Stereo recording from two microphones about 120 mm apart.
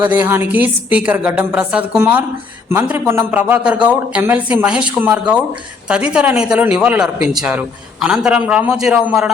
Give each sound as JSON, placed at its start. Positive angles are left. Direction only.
{"t": 0.0, "sound": "a man's voice", "side_deg": -15}
{"t": 2.6, "sound": "a man's voice", "side_deg": -20}